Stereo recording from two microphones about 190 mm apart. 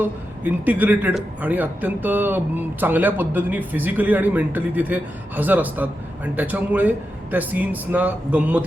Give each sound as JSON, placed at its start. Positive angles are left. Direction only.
{"t": 0.0, "sound": "a man's voice", "side_deg": -10}